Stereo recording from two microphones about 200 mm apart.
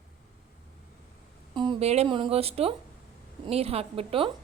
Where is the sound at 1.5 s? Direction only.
30° right (ahead or behind).